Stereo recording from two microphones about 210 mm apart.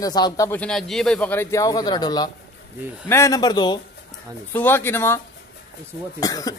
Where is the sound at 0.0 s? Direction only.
20° left (ahead or behind).